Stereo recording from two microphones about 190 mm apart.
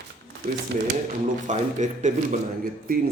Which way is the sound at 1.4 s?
40° right (ahead or behind).